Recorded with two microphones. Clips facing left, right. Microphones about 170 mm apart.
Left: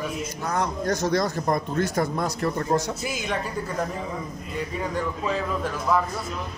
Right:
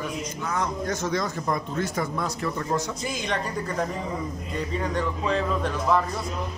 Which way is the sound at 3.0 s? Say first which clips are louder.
Even; 5° left (ahead or behind).